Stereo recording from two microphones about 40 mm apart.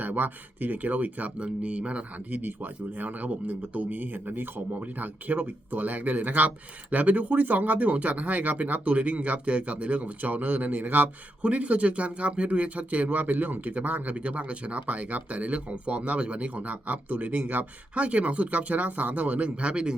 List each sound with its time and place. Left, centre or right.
0.0 s speech: right
1.4 s speech: right
2.4 s speech: right
11.4 s speech: right
19.6 s speech: right